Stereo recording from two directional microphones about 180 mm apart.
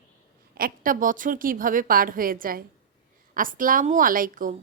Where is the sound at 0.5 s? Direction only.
50° right (ahead or behind).